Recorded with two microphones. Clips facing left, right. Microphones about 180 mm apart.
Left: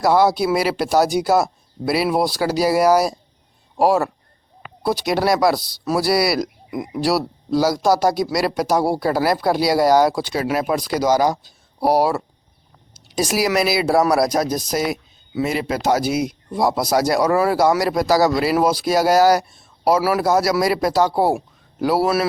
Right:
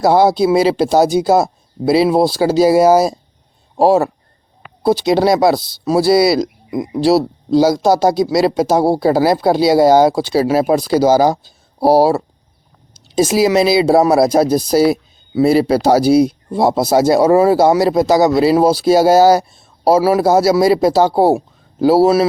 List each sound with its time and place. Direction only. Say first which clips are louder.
0.0 s speech: right 5 dB; 25° right (ahead or behind)